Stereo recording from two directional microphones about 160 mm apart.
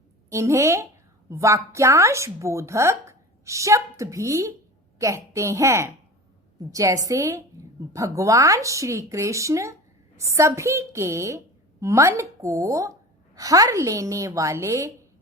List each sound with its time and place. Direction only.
0.3 s a woman's voice: 20° right (ahead or behind)